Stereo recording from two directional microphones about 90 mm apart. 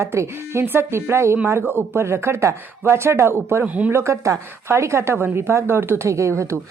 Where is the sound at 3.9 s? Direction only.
30° right (ahead or behind).